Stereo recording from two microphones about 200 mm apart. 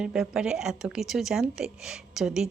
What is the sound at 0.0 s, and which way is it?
A woman's voice, 5° right (ahead or behind).